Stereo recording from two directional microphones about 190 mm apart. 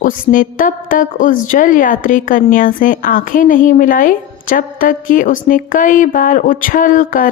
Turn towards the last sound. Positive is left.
turn(degrees=45)  # may be behind; listen again after turning